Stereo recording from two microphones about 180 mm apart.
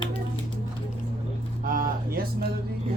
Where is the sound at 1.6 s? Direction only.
50° right (ahead or behind).